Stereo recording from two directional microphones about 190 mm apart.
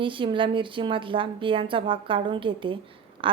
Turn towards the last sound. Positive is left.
turn(degrees=-25)  # may be behind; listen again after turning